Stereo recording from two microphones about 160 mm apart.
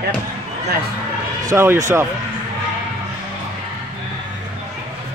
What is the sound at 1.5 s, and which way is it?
Speech, 20° right (ahead or behind).